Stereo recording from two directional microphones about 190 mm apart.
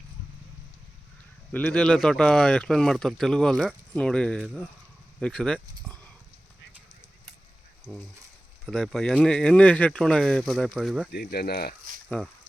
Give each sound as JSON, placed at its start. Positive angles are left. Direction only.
{"t": 1.5, "sound": "speech", "side_deg": 5}
{"t": 7.9, "sound": "speech", "side_deg": -5}
{"t": 11.1, "sound": "speech", "side_deg": 55}
{"t": 12.0, "sound": "speech", "side_deg": 0}